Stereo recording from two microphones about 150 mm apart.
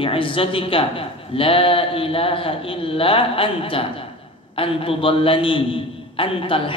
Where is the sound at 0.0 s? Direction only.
35° left (ahead or behind).